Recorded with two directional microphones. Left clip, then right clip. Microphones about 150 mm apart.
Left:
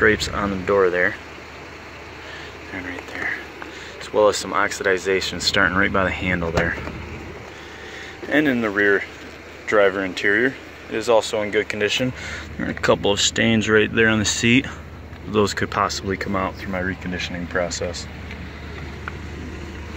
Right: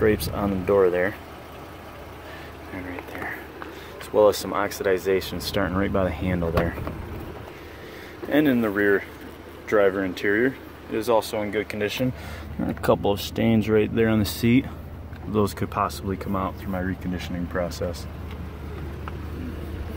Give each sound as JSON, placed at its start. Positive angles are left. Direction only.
{"t": 0.0, "sound": "speech", "side_deg": -15}
{"t": 2.7, "sound": "speech", "side_deg": -5}
{"t": 8.3, "sound": "speech", "side_deg": -15}
{"t": 17.6, "sound": "speech", "side_deg": -20}